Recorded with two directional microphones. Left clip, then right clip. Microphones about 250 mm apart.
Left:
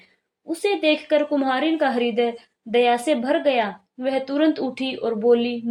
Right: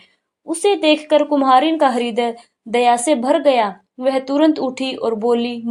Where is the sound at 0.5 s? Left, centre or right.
Centre.